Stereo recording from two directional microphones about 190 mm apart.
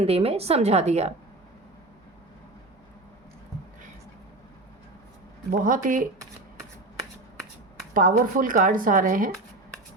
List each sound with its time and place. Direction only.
0.0 s a woman's voice: 30° right (ahead or behind)
5.5 s speech: 45° right (ahead or behind)
7.9 s speech: 45° right (ahead or behind)